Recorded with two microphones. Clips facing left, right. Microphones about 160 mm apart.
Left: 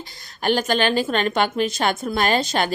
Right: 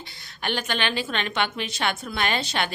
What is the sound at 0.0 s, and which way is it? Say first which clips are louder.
A woman's voice: left 8 dB; 40° left (ahead or behind).